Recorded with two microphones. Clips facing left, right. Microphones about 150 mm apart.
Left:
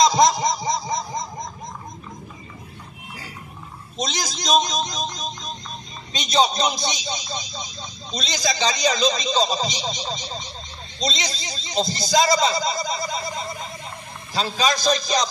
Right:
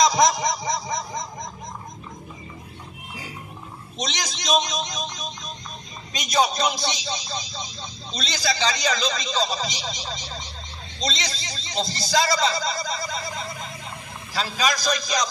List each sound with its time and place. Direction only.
0.0 s a sound: 25° left (ahead or behind)
0.7 s snicker: 25° left (ahead or behind)
4.0 s speech: 35° left (ahead or behind)
6.1 s a man's voice: 25° left (ahead or behind)